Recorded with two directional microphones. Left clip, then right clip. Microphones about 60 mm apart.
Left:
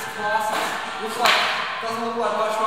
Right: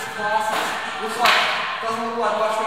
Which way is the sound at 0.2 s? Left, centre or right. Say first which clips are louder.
Right 1 dB; centre.